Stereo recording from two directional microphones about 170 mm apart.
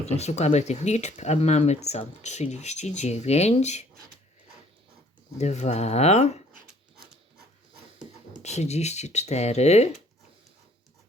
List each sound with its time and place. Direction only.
0.0 s speech: 40° left (ahead or behind)
5.4 s speech: 40° left (ahead or behind)
8.3 s speech: 40° left (ahead or behind)